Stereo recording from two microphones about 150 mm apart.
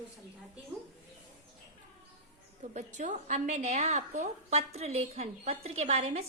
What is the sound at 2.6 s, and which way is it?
A woman's voice, 55° right (ahead or behind).